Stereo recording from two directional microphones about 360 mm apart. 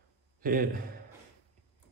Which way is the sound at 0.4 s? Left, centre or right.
Right.